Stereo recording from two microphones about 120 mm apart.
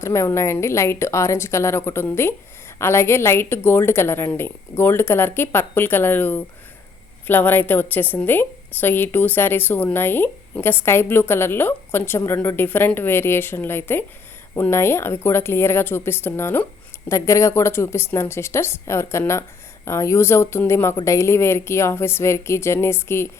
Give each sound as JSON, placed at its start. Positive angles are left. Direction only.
{"t": 0.0, "sound": "a woman's voice", "side_deg": 25}